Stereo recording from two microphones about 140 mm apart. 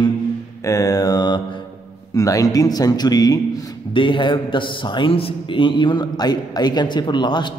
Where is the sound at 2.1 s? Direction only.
25° left (ahead or behind).